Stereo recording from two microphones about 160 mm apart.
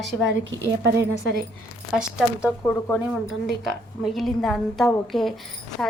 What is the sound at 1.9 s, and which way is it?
Speech, 5° right (ahead or behind).